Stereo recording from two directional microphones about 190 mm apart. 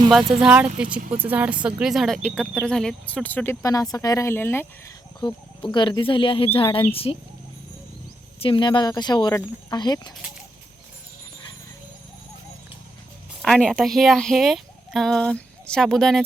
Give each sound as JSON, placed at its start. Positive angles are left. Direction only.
{"t": 0.3, "sound": "a woman's voice", "side_deg": -5}
{"t": 5.2, "sound": "speech", "side_deg": 25}
{"t": 8.4, "sound": "speech", "side_deg": 25}
{"t": 13.4, "sound": "speech", "side_deg": 5}